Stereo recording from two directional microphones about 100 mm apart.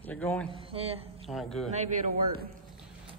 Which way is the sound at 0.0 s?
15° left (ahead or behind).